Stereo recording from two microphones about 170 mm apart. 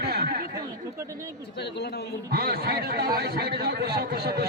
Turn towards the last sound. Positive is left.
turn(degrees=-65)  # may be behind; listen again after turning